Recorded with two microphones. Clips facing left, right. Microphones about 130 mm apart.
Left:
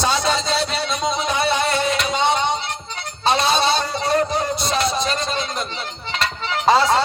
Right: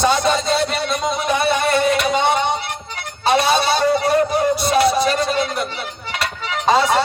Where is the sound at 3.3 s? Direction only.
60° right (ahead or behind).